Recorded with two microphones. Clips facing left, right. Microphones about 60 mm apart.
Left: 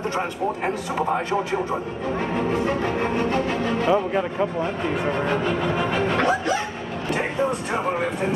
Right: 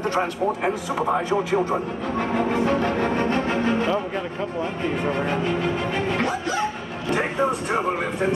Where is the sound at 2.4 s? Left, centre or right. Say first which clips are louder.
Right 3 dB; right.